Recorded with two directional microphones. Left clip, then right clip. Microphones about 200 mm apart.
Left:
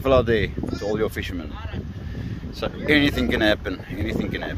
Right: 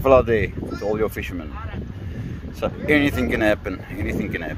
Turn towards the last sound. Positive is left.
turn(degrees=0)  # may be behind; listen again after turning